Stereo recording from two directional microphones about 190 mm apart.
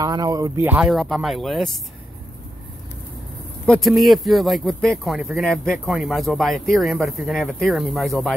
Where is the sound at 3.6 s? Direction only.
5° left (ahead or behind).